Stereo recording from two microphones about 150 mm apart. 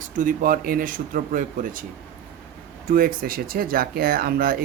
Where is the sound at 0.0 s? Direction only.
65° right (ahead or behind).